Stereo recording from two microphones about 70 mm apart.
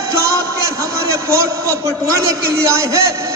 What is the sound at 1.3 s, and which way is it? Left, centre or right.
A man's voice, right.